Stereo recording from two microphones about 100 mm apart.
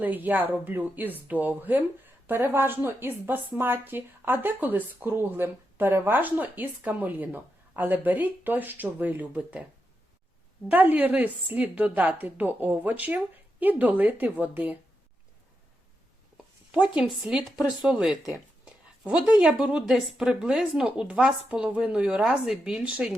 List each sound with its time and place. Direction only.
0.0 s a woman's voice: 15° right (ahead or behind)
10.7 s a woman's voice: 15° right (ahead or behind)
16.7 s a woman's voice: 10° right (ahead or behind)